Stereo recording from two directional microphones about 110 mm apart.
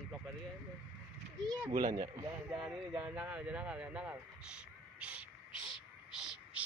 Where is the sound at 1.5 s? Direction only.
35° right (ahead or behind).